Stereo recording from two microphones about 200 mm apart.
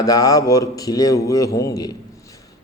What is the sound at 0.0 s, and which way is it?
A man's voice, 15° left (ahead or behind).